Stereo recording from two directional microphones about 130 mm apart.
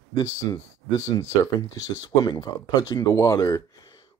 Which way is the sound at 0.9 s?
25° left (ahead or behind).